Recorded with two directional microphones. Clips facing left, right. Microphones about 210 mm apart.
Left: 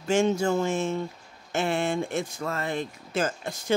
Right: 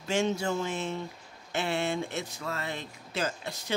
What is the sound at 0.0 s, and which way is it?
Speech, 50° left (ahead or behind).